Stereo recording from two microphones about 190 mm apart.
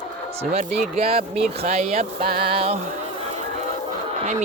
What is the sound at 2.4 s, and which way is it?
Music, 30° right (ahead or behind).